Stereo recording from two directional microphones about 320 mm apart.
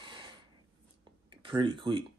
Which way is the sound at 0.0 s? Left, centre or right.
Centre.